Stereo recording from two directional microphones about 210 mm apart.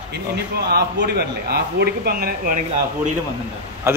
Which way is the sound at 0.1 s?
50° right (ahead or behind).